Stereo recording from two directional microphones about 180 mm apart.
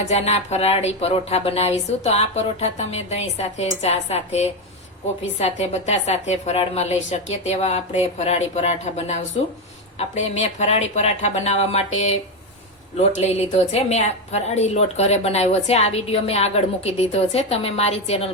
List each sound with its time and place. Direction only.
0.1 s a woman's voice: 35° left (ahead or behind)
13.0 s a woman's voice: 40° left (ahead or behind)